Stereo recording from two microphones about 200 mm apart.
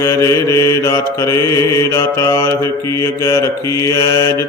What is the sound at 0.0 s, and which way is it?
Mantra, 15° left (ahead or behind).